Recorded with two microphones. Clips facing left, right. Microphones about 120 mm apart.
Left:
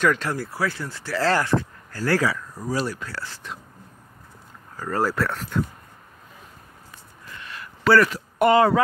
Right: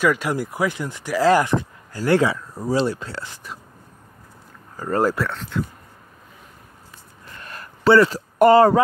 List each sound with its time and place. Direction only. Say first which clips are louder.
0.0 s speech: right 2 dB; 10° right (ahead or behind)
4.7 s speech: right 4 dB; 25° right (ahead or behind)
5.1 s speech: even; 5° left (ahead or behind)
7.4 s a sound: right 2 dB; 45° right (ahead or behind)
7.8 s speech: right 3 dB; 25° right (ahead or behind)
8.1 s speech: right 5 dB; 35° right (ahead or behind)